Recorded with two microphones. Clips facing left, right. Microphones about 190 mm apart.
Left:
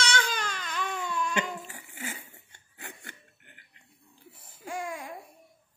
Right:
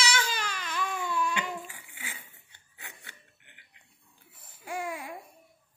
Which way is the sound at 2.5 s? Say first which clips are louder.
Left 5 dB; 50° left (ahead or behind).